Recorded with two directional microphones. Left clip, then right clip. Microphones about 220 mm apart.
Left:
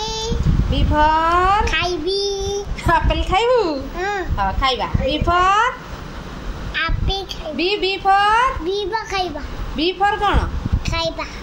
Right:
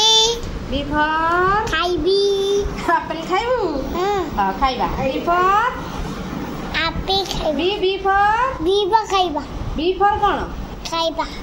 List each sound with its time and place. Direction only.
0.0 s a sound: 10° right (ahead or behind)
0.7 s a sound: 40° left (ahead or behind)
1.6 s child singing: 5° left (ahead or behind)
2.9 s a woman's voice: 40° left (ahead or behind)
6.7 s a sound: 10° right (ahead or behind)
7.5 s a woman's voice: 40° left (ahead or behind)
8.6 s a child's voice: centre (ahead or behind)
9.8 s a woman's voice: 40° left (ahead or behind)
10.9 s a woman's voice: 5° left (ahead or behind)